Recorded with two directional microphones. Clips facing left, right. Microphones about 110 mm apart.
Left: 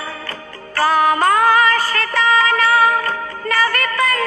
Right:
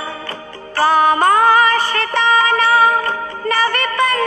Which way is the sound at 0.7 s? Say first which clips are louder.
Right 2 dB; 25° right (ahead or behind).